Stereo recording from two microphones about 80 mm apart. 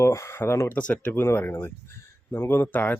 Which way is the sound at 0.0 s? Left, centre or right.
Left.